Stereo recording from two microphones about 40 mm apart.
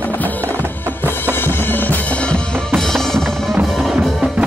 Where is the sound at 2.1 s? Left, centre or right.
Left.